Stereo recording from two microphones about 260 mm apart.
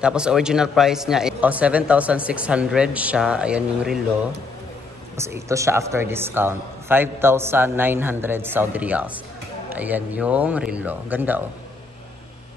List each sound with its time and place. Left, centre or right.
0.0 s a man's voice: centre